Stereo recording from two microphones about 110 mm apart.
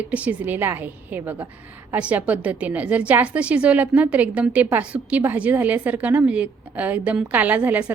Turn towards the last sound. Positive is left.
turn(degrees=-15)  # may be behind; listen again after turning